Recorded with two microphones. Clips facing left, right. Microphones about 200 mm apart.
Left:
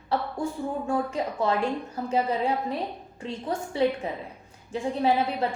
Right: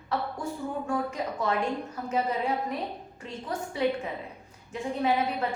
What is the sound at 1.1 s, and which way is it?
A woman's voice, 30° left (ahead or behind).